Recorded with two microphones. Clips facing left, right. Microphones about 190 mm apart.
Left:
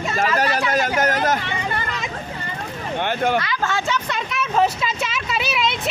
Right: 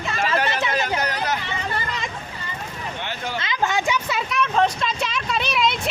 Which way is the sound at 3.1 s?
55° left (ahead or behind).